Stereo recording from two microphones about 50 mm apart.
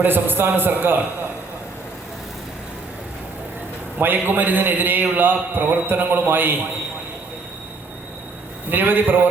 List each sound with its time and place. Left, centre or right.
0.0 s a man's voice: right
4.0 s a man's voice: right
8.7 s a man's voice: right